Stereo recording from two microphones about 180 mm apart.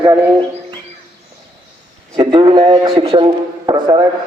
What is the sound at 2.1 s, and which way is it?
A man's voice, 25° right (ahead or behind).